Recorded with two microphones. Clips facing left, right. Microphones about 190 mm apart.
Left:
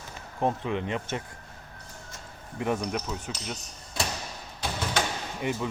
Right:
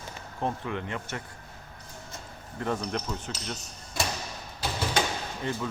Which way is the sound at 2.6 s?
10° left (ahead or behind).